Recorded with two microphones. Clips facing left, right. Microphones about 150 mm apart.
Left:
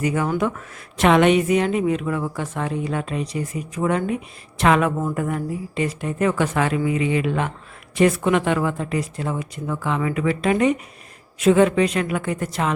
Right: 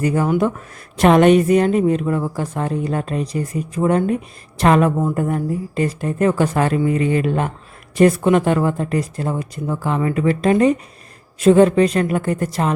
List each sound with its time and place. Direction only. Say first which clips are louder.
0.0 s speech: right 4 dB; 35° right (ahead or behind)